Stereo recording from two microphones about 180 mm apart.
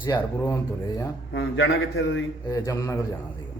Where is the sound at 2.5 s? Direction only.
15° left (ahead or behind).